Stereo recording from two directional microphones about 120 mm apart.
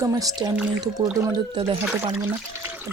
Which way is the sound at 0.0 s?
30° right (ahead or behind).